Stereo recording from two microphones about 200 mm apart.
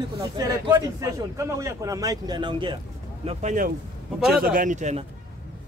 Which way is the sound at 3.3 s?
40° right (ahead or behind).